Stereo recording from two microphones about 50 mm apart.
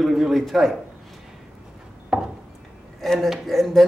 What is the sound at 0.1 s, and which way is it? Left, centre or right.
Speech, centre.